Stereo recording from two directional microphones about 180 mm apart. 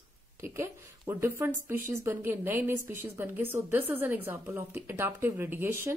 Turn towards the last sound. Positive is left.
turn(degrees=-10)  # may be behind; listen again after turning